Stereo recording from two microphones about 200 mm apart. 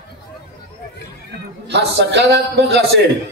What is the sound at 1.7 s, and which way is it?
A man's voice, 60° right (ahead or behind).